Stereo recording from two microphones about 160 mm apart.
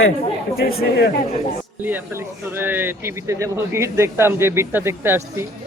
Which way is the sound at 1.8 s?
15° right (ahead or behind).